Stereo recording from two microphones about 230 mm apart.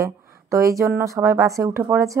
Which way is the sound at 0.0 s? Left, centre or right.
Centre.